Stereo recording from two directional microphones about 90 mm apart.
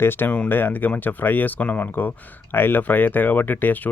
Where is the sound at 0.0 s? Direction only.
25° left (ahead or behind).